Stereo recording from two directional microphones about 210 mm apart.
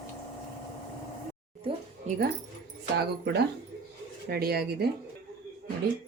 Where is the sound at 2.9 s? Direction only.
50° right (ahead or behind).